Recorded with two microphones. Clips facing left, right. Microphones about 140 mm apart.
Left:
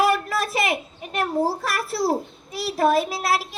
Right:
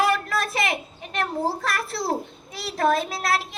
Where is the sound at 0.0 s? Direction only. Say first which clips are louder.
Left 2 dB; 5° left (ahead or behind).